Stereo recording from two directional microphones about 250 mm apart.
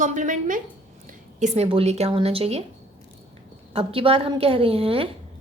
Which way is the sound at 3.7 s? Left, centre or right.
Right.